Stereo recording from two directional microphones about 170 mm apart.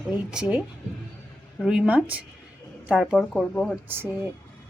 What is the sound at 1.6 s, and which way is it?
A woman's voice, 5° right (ahead or behind).